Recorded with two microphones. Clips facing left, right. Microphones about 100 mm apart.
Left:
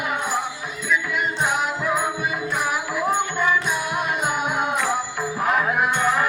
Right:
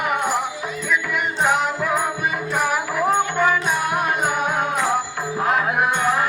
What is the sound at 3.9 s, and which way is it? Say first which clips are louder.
Music: right 3 dB; 45° right (ahead or behind).